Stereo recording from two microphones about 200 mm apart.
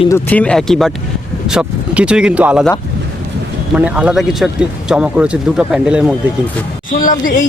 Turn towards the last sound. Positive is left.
turn(degrees=40)  # may be behind; listen again after turning